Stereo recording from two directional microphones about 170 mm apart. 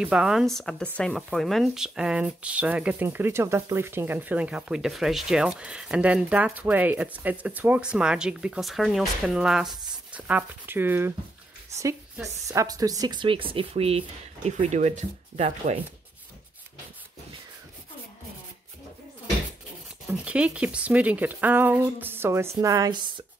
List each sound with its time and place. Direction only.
0.0 s speech: 5° right (ahead or behind)
12.4 s speech: 20° right (ahead or behind); by 15.8 s 40° right (ahead or behind)
20.1 s speech: 5° right (ahead or behind); by 23.2 s 25° right (ahead or behind)